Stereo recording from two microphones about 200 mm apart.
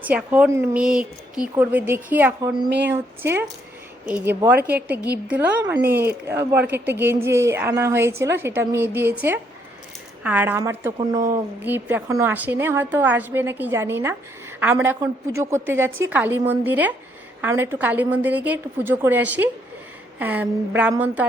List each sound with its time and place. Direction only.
0.0 s a woman's voice: 5° right (ahead or behind)
2.6 s speech: 60° right (ahead or behind)
2.9 s a woman's voice: 10° right (ahead or behind)
11.6 s a woman's voice: 10° right (ahead or behind)
15.9 s a woman's voice: 90° right
16.1 s a woman's voice: 10° right (ahead or behind)